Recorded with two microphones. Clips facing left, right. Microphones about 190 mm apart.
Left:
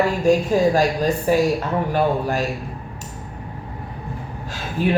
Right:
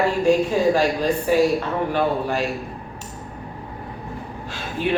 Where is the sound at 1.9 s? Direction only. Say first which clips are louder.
Left 2 dB; 45° left (ahead or behind).